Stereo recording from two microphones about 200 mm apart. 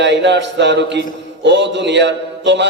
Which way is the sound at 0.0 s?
60° right (ahead or behind).